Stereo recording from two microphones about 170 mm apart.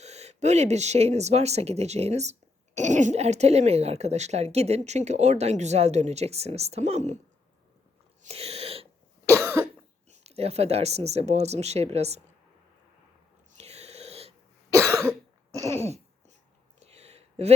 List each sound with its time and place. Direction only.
0.0 s speech: 40° right (ahead or behind)
8.2 s sneeze: 40° right (ahead or behind)
9.4 s cough: 15° right (ahead or behind)
10.1 s speech: 40° right (ahead or behind)
13.6 s wheeze: 40° right (ahead or behind)
14.7 s cough: 15° right (ahead or behind)
16.8 s a sound: 40° right (ahead or behind)